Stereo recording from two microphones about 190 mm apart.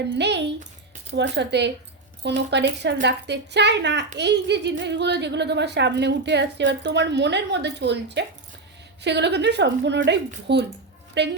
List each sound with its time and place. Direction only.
0.1 s a woman's voice: 65° right (ahead or behind)